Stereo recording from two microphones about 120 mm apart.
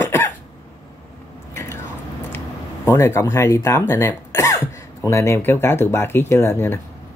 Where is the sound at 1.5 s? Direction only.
25° left (ahead or behind).